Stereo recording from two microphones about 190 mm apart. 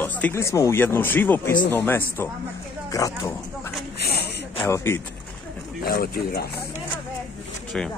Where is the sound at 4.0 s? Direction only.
60° left (ahead or behind).